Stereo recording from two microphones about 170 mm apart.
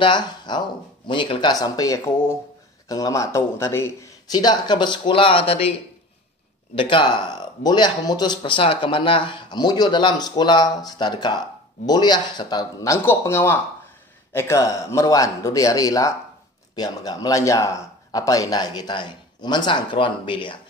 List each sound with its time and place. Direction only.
0.0 s speech: 25° left (ahead or behind)